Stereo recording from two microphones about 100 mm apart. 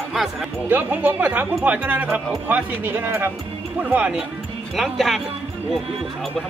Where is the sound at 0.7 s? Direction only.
20° right (ahead or behind).